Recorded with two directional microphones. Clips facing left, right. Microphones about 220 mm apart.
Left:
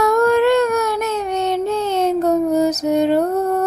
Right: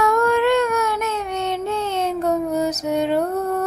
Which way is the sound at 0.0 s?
40° left (ahead or behind).